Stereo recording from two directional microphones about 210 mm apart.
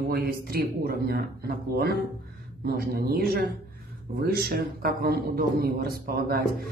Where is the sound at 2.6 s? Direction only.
45° right (ahead or behind).